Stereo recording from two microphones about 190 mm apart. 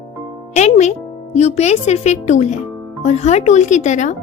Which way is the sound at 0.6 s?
35° left (ahead or behind).